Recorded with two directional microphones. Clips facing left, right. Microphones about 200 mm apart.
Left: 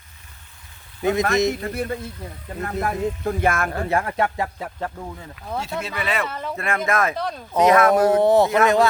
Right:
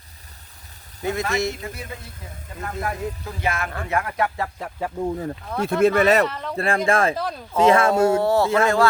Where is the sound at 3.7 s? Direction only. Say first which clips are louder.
Left 3 dB; 30° left (ahead or behind).